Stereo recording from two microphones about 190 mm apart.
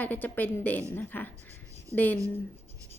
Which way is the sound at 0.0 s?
10° left (ahead or behind).